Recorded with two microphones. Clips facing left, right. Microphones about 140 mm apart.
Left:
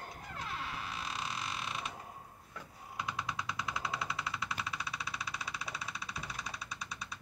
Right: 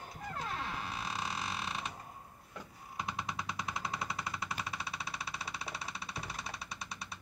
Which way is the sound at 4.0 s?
40° right (ahead or behind).